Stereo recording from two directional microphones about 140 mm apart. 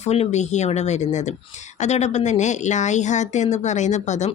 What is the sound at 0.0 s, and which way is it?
Speech, 50° left (ahead or behind).